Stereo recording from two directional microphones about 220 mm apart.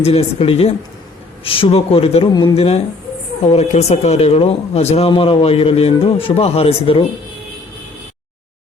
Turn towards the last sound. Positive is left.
turn(degrees=25)  # may be behind; listen again after turning